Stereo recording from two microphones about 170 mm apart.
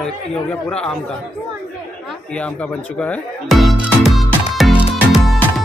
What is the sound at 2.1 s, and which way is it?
Speech, 5° left (ahead or behind).